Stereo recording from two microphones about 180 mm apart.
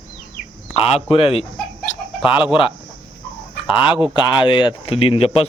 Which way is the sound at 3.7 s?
30° left (ahead or behind).